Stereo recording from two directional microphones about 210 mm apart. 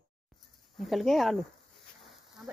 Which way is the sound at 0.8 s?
Centre (ahead or behind).